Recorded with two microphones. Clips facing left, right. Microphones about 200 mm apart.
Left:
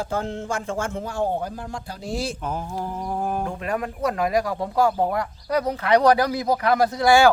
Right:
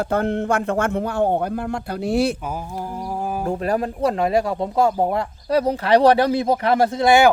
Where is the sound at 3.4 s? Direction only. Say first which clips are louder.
Right 5 dB; 40° right (ahead or behind).